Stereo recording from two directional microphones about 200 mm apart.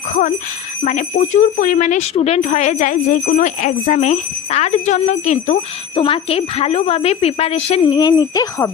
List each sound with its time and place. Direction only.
0.1 s speech: 40° left (ahead or behind); by 8.7 s 15° left (ahead or behind)